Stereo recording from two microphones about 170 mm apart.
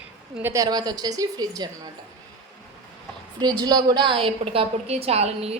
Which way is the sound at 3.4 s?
25° right (ahead or behind).